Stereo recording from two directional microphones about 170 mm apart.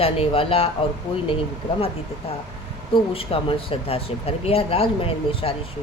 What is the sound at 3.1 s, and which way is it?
Speech, 35° left (ahead or behind).